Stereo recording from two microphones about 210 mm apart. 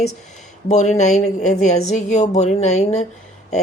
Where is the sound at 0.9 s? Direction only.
35° left (ahead or behind).